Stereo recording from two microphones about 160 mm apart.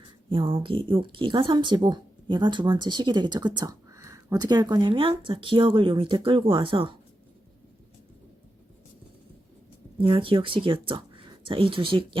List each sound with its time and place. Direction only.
0.3 s speech: 35° right (ahead or behind)
10.0 s speech: 35° right (ahead or behind)